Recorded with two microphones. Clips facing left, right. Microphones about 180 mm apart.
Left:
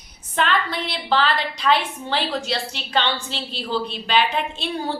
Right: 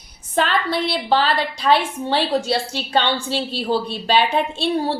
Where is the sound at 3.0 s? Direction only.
45° right (ahead or behind).